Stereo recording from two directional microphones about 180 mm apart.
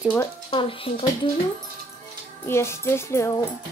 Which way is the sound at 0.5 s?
30° left (ahead or behind).